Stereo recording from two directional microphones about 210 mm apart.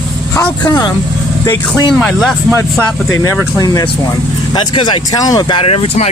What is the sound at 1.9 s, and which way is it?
Speech, centre (ahead or behind).